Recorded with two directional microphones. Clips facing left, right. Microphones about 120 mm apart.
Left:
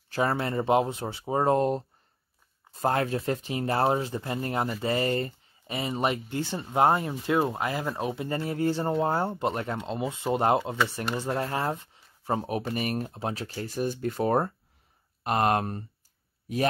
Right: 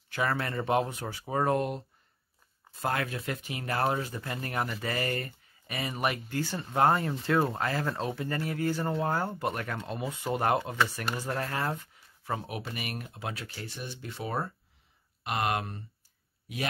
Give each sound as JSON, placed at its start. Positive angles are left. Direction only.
{"t": 0.1, "sound": "speech", "side_deg": 30}